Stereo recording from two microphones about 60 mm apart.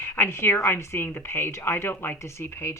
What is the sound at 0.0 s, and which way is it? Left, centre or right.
A woman's voice, left.